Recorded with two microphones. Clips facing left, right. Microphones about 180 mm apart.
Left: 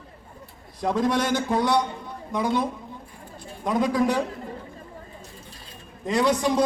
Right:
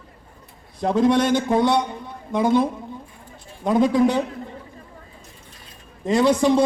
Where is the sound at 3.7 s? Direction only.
25° right (ahead or behind).